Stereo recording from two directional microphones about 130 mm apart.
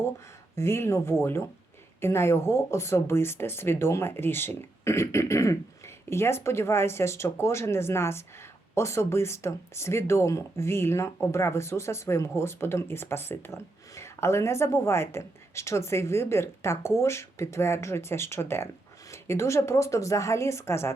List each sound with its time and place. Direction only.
0.5 s speech: 20° left (ahead or behind)